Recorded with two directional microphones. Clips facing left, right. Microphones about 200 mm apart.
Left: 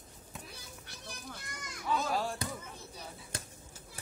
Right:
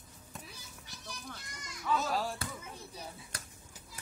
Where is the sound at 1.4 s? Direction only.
55° left (ahead or behind).